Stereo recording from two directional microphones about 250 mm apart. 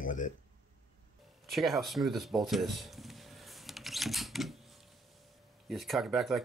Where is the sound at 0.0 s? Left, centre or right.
Left.